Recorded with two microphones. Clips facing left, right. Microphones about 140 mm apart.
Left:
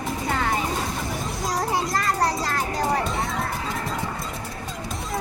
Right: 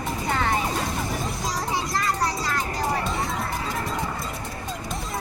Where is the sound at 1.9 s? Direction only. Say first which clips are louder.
Left 2 dB; 55° left (ahead or behind).